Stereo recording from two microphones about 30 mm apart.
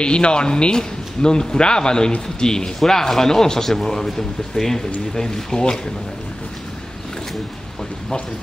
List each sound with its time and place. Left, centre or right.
0.0 s a man's voice: left